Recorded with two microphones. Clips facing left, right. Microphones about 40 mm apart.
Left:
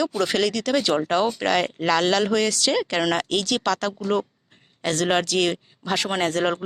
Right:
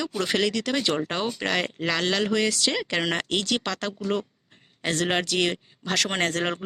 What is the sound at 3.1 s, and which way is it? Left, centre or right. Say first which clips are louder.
Speech: left 3 dB; right.